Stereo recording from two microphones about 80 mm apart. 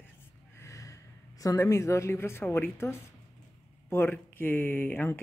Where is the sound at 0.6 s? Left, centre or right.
Left.